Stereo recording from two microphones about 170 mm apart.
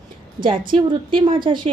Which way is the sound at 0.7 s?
30° right (ahead or behind).